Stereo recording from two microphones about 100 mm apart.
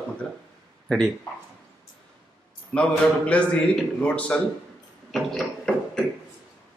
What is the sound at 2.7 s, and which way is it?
A man's voice, 10° left (ahead or behind).